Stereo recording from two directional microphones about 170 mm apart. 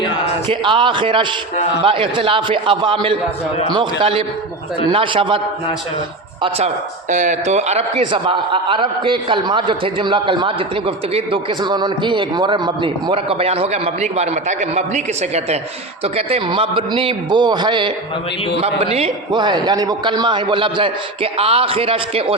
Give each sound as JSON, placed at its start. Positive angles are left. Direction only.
{"t": 0.5, "sound": "a man's voice", "side_deg": -30}
{"t": 7.1, "sound": "a man's voice", "side_deg": -45}